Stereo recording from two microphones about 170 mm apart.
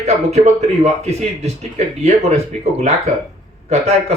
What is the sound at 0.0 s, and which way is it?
Speech, 40° right (ahead or behind).